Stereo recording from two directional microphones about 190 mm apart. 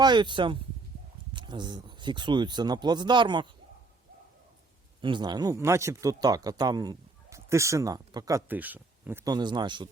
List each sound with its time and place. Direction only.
0.0 s speech: 25° right (ahead or behind)
4.9 s speech: 25° right (ahead or behind)